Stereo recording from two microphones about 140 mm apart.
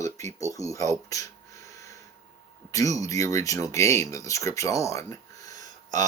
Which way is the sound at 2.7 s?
25° left (ahead or behind).